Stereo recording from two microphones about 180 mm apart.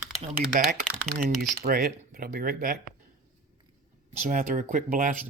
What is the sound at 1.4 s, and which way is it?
Speech, 55° right (ahead or behind).